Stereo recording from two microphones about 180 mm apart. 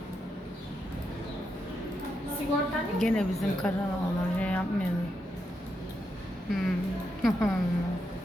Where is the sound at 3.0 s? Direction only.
5° left (ahead or behind).